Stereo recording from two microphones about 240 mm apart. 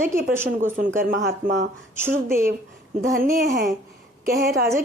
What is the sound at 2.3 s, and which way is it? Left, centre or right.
A woman's voice, right.